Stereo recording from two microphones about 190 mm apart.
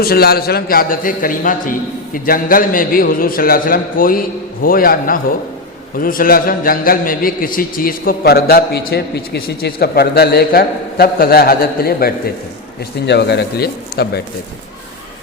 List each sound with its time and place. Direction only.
0.0 s a man's voice: 55° left (ahead or behind)